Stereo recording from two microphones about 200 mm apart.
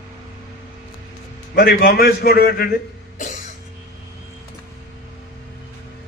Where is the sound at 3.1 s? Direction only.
40° left (ahead or behind).